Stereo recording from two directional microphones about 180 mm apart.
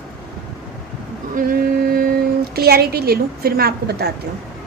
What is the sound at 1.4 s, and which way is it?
Speech, 55° right (ahead or behind).